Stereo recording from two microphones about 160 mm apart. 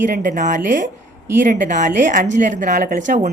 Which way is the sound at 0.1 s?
55° right (ahead or behind).